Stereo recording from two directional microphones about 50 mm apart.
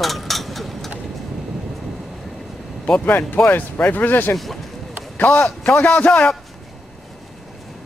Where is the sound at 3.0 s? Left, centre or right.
Left.